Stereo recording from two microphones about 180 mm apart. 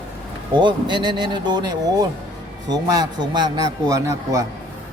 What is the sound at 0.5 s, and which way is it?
A man's voice, 25° right (ahead or behind).